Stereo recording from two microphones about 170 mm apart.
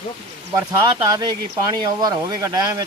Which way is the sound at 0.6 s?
20° right (ahead or behind).